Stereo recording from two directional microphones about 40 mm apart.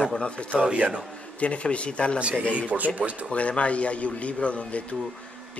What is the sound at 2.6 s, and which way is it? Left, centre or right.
Speech, right.